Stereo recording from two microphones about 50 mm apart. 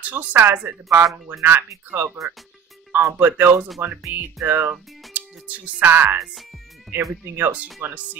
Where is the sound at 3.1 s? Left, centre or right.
Right.